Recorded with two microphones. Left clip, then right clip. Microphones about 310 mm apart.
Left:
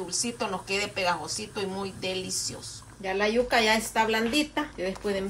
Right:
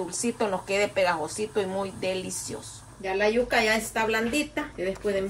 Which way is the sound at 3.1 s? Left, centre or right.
Left.